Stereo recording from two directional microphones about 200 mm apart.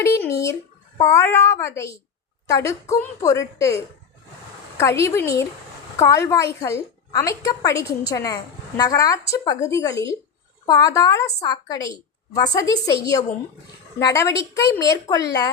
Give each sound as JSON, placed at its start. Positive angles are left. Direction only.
{"t": 0.0, "sound": "a woman's voice", "side_deg": 15}